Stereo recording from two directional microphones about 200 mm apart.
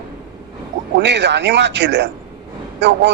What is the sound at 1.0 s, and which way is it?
A man's voice, 60° right (ahead or behind).